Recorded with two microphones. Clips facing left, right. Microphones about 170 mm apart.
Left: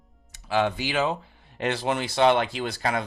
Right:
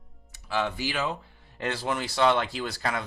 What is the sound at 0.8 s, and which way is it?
Speech, 20° left (ahead or behind).